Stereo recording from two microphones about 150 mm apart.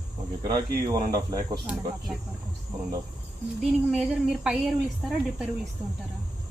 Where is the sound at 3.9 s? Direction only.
5° right (ahead or behind).